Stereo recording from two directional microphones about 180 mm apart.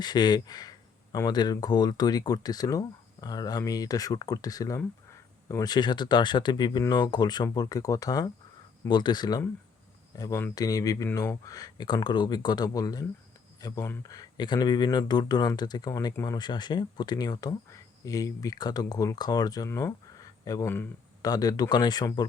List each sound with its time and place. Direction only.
0.0 s speech: 25° left (ahead or behind)